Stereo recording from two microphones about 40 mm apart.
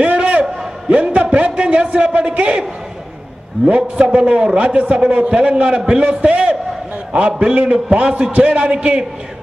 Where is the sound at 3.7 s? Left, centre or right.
Right.